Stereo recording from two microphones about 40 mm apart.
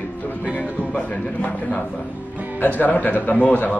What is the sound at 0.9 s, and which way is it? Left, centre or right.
Speech, left.